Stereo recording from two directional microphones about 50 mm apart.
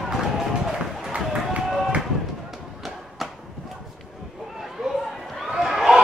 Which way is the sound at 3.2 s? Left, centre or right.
Centre.